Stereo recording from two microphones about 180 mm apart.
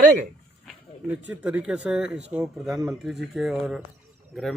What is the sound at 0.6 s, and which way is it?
Speech, 10° right (ahead or behind).